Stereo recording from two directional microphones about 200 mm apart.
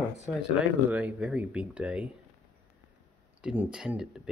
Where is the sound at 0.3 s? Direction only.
5° right (ahead or behind).